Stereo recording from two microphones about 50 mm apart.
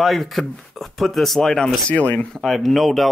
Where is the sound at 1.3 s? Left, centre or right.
Centre.